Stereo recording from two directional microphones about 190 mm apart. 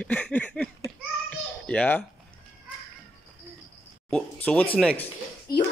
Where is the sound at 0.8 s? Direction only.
5° left (ahead or behind).